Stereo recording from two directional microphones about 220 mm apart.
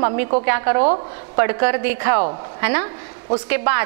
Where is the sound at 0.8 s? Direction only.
30° right (ahead or behind).